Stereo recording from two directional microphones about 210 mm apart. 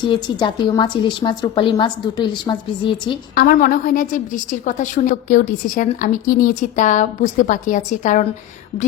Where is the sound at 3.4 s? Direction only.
40° left (ahead or behind).